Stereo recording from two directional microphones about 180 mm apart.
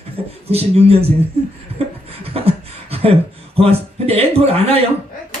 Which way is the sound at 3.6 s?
35° right (ahead or behind).